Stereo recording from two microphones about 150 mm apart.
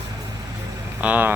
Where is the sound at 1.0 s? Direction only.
10° right (ahead or behind).